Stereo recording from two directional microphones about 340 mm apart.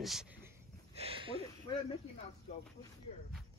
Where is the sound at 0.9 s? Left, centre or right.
Centre.